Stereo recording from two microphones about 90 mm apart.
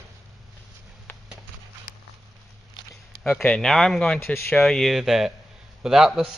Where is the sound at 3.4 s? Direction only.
10° left (ahead or behind).